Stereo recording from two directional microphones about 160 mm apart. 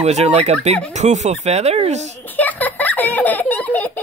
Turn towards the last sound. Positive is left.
turn(degrees=10)  # may be behind; listen again after turning